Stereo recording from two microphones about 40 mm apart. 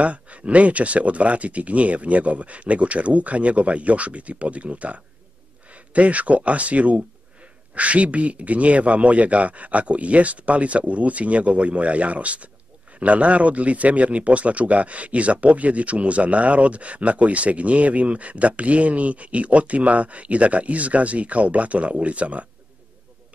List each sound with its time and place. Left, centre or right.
0.0 s speech: right